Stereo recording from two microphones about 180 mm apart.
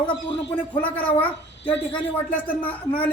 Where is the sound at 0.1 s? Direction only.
25° left (ahead or behind).